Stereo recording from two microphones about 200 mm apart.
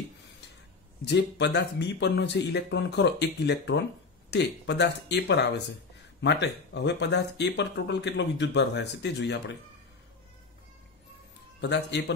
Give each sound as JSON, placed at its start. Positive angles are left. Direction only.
{"t": 1.0, "sound": "speech", "side_deg": 60}